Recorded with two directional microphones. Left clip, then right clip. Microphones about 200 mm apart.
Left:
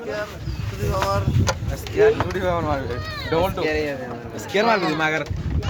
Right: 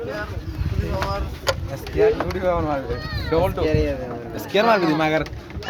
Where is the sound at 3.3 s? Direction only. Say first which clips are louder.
Right 1 dB; 5° right (ahead or behind).